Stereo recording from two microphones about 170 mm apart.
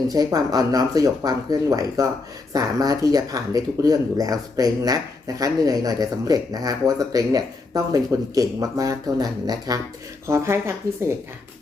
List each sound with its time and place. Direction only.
0.1 s speech: 20° right (ahead or behind)